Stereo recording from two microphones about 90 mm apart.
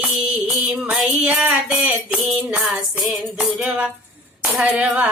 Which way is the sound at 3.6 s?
15° right (ahead or behind).